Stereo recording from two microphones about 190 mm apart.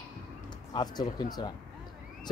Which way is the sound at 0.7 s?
20° left (ahead or behind).